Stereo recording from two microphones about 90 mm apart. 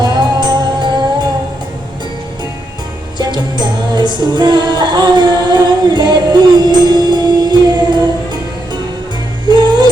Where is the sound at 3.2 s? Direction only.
55° right (ahead or behind).